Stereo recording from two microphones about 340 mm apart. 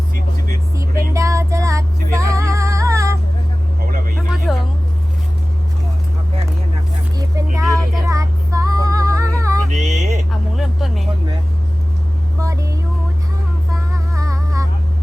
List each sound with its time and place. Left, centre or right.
0.8 s music: centre
4.5 s vehicle: centre
7.2 s vehicle: centre
7.8 s female singing: centre
9.8 s vehicle: right
10.6 s vehicle: centre
12.4 s a sound: centre
14.2 s music: centre